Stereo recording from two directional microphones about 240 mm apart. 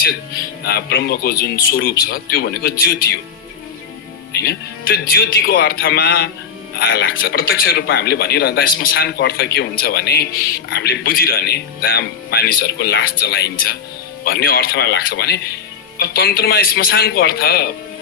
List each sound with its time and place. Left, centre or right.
0.1 s speech: left
5.1 s speech: left